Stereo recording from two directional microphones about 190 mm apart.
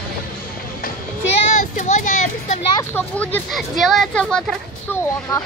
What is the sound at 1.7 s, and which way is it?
Speech, 40° left (ahead or behind).